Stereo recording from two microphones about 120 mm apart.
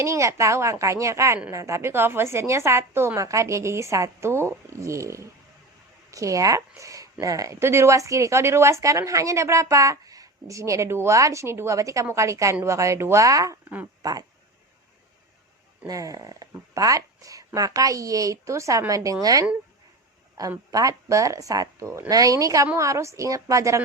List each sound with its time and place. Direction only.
0.0 s speech: 25° right (ahead or behind)
15.9 s speech: 30° right (ahead or behind)
20.7 s speech: 30° right (ahead or behind)